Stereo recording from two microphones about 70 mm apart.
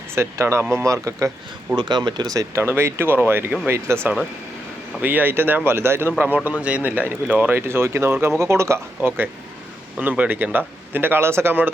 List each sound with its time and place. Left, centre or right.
0.1 s speech: right
1.7 s speech: right
2.6 s speech: right
4.9 s speech: right
7.7 s speech: right
9.0 s speech: right